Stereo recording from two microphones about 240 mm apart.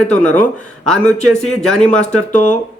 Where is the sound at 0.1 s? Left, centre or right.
Centre.